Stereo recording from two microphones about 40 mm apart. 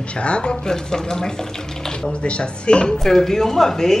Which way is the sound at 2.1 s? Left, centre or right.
Left.